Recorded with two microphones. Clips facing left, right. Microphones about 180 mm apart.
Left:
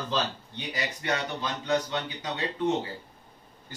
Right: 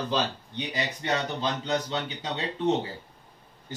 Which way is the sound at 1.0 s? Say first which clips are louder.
Right 1 dB; 25° right (ahead or behind).